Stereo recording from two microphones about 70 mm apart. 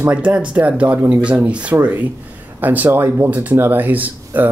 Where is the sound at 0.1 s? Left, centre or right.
Centre.